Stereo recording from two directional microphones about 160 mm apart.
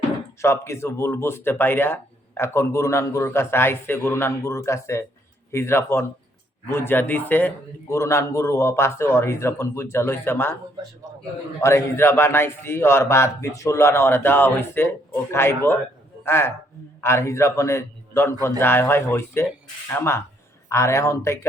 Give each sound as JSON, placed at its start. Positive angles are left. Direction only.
{"t": 0.4, "sound": "speech", "side_deg": 15}
{"t": 11.6, "sound": "a man's voice", "side_deg": 15}